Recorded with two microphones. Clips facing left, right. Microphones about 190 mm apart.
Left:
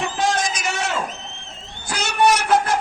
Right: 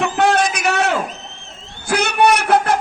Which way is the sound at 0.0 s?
65° right (ahead or behind).